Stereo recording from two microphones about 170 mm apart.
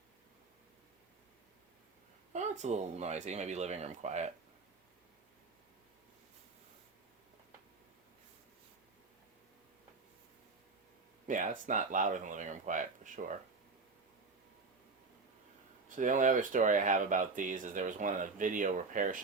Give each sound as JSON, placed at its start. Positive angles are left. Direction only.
{"t": 2.3, "sound": "speech", "side_deg": -45}
{"t": 11.3, "sound": "speech", "side_deg": -50}
{"t": 16.0, "sound": "speech", "side_deg": -50}